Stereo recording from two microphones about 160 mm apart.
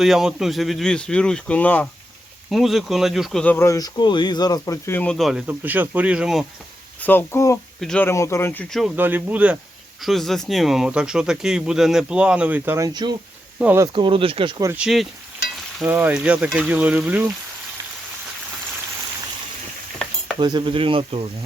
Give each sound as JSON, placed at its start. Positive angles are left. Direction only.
{"t": 0.0, "sound": "speech", "side_deg": 0}
{"t": 2.5, "sound": "speech", "side_deg": 0}
{"t": 3.4, "sound": "speech", "side_deg": 15}
{"t": 5.1, "sound": "speech", "side_deg": 0}
{"t": 5.5, "sound": "speech", "side_deg": -10}
{"t": 7.0, "sound": "speech", "side_deg": 15}
{"t": 7.8, "sound": "speech", "side_deg": 5}
{"t": 8.0, "sound": "speech", "side_deg": 20}
{"t": 9.0, "sound": "speech", "side_deg": -10}
{"t": 13.6, "sound": "speech", "side_deg": -10}
{"t": 13.8, "sound": "speech", "side_deg": -30}
{"t": 14.8, "sound": "speech", "side_deg": 0}
{"t": 20.4, "sound": "speech", "side_deg": -30}